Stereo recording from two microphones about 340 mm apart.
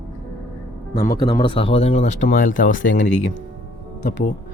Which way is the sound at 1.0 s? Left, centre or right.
Left.